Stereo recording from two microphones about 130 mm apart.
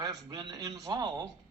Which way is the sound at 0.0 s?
30° right (ahead or behind).